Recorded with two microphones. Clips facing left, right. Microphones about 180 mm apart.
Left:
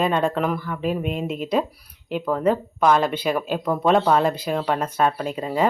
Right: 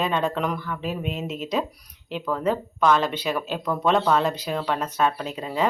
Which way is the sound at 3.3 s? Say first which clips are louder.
Left 4 dB; 50° left (ahead or behind).